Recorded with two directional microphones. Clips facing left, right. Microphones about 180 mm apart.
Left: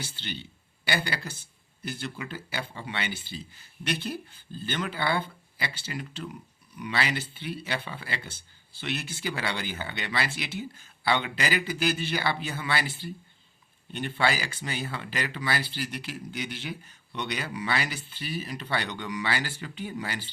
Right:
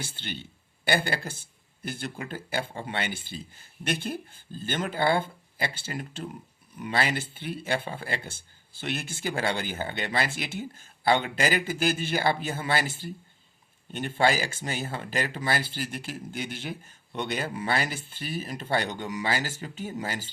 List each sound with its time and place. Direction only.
0.0 s speech: 50° right (ahead or behind)